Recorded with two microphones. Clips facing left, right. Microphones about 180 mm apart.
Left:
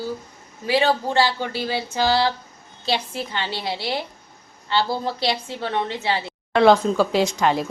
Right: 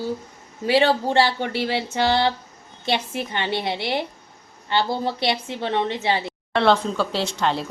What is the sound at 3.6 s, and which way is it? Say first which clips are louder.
A woman's voice: right 2 dB; 20° right (ahead or behind).